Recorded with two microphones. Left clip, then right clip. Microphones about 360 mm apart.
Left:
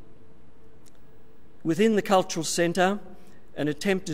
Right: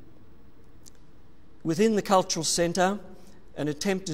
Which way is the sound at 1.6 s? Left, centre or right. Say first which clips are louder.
Left 1 dB; centre.